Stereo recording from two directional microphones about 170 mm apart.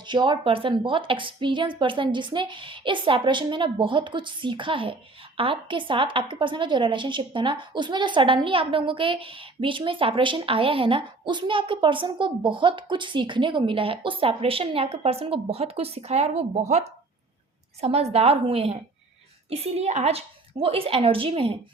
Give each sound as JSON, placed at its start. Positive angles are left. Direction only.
{"t": 0.1, "sound": "a woman's voice", "side_deg": -25}